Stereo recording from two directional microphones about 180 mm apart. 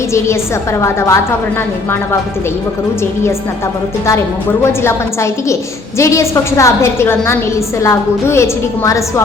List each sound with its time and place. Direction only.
0.1 s a woman's voice: 15° left (ahead or behind)
4.8 s a woman's voice: 15° left (ahead or behind)